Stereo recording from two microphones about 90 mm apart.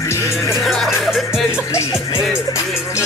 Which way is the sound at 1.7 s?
35° left (ahead or behind).